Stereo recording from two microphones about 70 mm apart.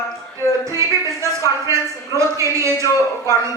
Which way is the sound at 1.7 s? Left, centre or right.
Right.